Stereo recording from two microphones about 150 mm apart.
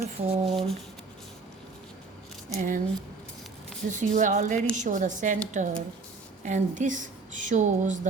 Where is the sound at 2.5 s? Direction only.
55° right (ahead or behind).